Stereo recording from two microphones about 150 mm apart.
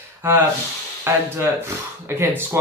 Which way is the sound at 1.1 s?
15° right (ahead or behind).